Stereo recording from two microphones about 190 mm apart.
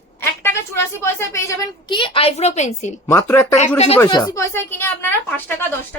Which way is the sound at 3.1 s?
15° left (ahead or behind).